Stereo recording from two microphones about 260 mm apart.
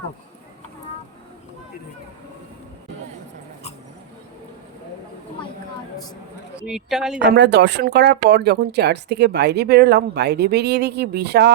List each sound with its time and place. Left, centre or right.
6.6 s speech: centre
7.2 s speech: right